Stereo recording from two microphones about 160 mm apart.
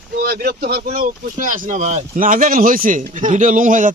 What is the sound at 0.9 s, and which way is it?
Speech, 55° right (ahead or behind).